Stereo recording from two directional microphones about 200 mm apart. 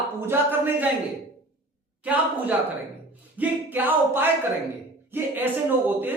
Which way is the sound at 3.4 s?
10° right (ahead or behind).